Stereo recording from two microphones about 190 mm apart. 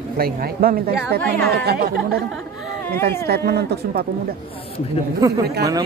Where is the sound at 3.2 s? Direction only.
55° right (ahead or behind).